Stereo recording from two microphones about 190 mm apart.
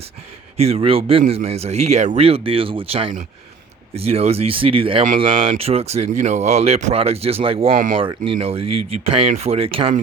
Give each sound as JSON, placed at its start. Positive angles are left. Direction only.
{"t": 0.5, "sound": "a man's voice", "side_deg": -35}